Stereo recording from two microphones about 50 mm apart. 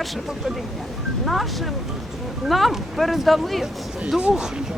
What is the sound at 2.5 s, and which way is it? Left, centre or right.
Speech, centre.